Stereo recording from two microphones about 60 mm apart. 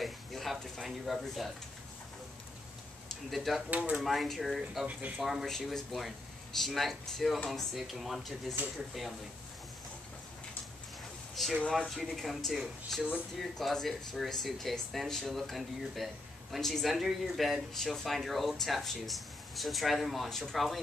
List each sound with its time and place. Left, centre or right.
0.0 s speech: centre
3.3 s speech: centre
4.8 s speech: right
5.2 s speech: centre
11.4 s speech: centre